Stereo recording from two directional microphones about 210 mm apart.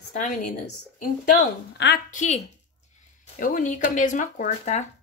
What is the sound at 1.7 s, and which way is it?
Speech, 55° left (ahead or behind).